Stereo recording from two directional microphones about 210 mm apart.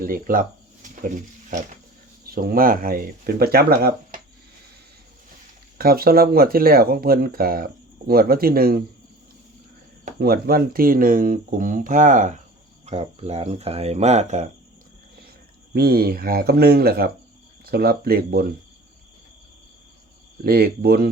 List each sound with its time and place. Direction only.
0.0 s speech: 40° right (ahead or behind)
5.7 s speech: 45° right (ahead or behind)
10.2 s speech: 45° right (ahead or behind)
15.7 s speech: 45° right (ahead or behind)
20.4 s speech: 45° right (ahead or behind)